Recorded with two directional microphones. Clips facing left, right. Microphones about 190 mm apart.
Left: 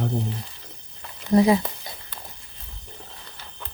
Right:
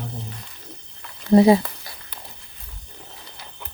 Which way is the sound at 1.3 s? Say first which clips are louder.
Right 4 dB; 30° right (ahead or behind).